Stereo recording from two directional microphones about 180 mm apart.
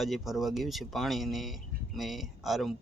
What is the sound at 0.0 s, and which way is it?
Speech, centre (ahead or behind).